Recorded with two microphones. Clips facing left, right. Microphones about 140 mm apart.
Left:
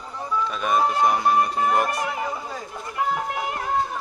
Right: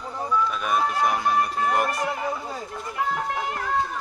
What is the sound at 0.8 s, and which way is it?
Speech, 25° left (ahead or behind).